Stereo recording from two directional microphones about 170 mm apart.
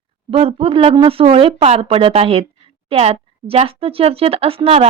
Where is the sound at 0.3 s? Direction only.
35° right (ahead or behind).